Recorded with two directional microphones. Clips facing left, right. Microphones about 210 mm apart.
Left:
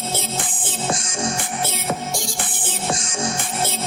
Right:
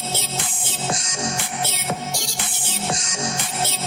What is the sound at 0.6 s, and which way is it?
Music, 50° left (ahead or behind).